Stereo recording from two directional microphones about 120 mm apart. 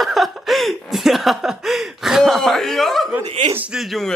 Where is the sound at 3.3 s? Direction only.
65° right (ahead or behind).